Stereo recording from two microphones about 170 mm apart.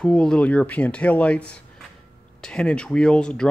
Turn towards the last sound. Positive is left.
turn(degrees=5)  # may be behind; listen again after turning